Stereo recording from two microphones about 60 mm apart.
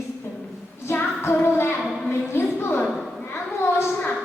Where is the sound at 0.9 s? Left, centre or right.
Left.